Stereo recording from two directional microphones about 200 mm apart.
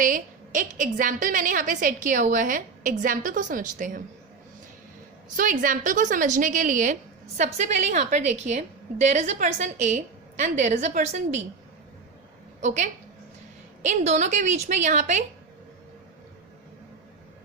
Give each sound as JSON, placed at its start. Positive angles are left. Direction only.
{"t": 0.0, "sound": "a woman's voice", "side_deg": -40}
{"t": 5.4, "sound": "a woman's voice", "side_deg": -40}
{"t": 12.6, "sound": "a woman's voice", "side_deg": -35}